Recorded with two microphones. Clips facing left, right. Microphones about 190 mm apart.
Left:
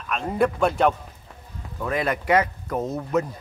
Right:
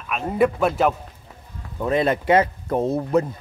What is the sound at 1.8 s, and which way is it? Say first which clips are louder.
Speech: right 5 dB; 25° right (ahead or behind).